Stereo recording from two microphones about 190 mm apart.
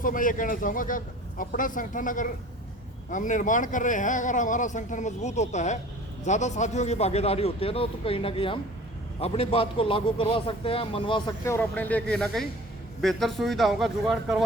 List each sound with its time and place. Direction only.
0.0 s a man's voice: 45° left (ahead or behind); by 11.3 s 25° left (ahead or behind)
11.4 s speech: 10° left (ahead or behind)